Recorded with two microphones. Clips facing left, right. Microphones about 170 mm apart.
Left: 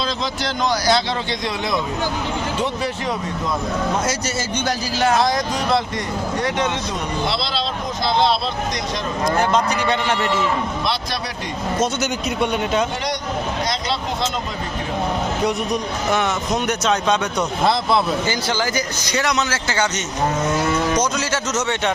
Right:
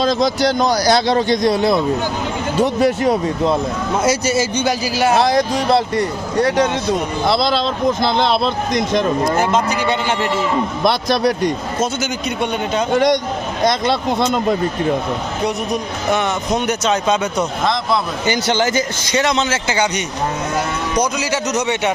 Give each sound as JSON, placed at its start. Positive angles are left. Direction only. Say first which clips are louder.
{"t": 0.0, "sound": "a man's voice", "louder": "right 9 dB", "side_deg": -40}
{"t": 4.0, "sound": "a man's voice", "louder": "right 7 dB", "side_deg": -10}
{"t": 5.1, "sound": "a man's voice", "louder": "right 4 dB", "side_deg": -30}
{"t": 7.3, "sound": "speech", "louder": "right 7 dB", "side_deg": -45}
{"t": 9.4, "sound": "speech", "louder": "right 2 dB", "side_deg": -5}
{"t": 10.8, "sound": "speech", "louder": "right 9 dB", "side_deg": -50}
{"t": 13.7, "sound": "speech", "louder": "right 7 dB", "side_deg": -55}
{"t": 15.4, "sound": "speech", "louder": "right 4 dB", "side_deg": 0}
{"t": 18.3, "sound": "a man's voice", "louder": "right 5 dB", "side_deg": -20}
{"t": 21.0, "sound": "a man's voice", "louder": "right 3 dB", "side_deg": -15}